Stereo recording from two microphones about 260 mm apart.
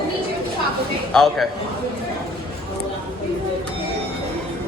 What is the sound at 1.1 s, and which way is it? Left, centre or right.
Speech, centre.